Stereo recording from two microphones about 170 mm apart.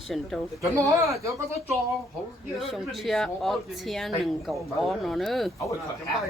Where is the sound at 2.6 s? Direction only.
Centre (ahead or behind).